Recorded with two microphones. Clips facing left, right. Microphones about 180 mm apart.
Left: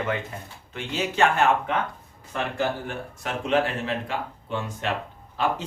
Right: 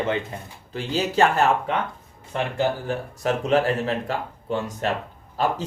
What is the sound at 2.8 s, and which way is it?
Speech, 40° right (ahead or behind).